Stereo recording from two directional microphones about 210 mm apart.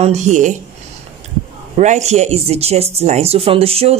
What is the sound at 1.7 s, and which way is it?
Speech, 35° right (ahead or behind).